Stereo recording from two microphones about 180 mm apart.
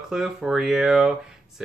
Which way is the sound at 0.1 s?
Centre (ahead or behind).